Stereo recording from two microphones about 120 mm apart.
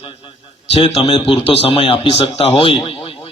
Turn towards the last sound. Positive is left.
turn(degrees=50)  # may be behind; listen again after turning